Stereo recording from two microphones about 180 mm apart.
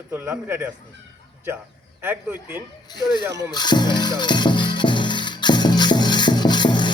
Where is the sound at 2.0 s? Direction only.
10° right (ahead or behind).